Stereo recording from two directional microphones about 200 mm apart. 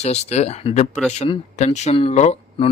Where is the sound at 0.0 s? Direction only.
35° left (ahead or behind).